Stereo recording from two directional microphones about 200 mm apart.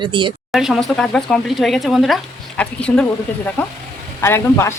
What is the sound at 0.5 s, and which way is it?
A man's voice, centre (ahead or behind).